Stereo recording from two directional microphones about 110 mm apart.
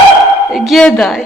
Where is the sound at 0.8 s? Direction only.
10° left (ahead or behind).